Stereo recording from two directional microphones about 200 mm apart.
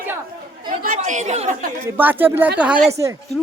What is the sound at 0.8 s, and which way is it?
Speech, 40° right (ahead or behind).